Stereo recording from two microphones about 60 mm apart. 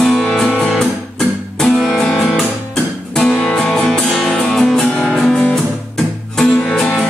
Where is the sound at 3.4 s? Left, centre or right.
Centre.